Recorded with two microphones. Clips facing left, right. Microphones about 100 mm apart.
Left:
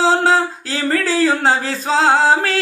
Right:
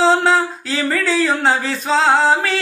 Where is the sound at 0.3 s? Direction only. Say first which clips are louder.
Even; 30° left (ahead or behind).